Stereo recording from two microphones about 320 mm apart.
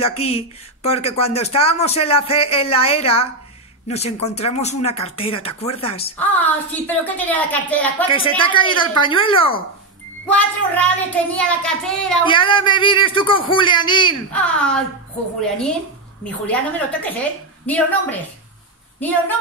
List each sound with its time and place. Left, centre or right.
0.0 s speech: centre
6.1 s a child's voice: centre
8.1 s a man's voice: centre
10.3 s a child's voice: centre
12.3 s a man's voice: centre
14.3 s a child's voice: centre
16.4 s a child's voice: centre